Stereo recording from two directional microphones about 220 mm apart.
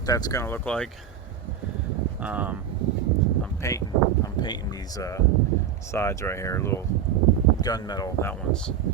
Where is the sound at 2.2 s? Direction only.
5° right (ahead or behind).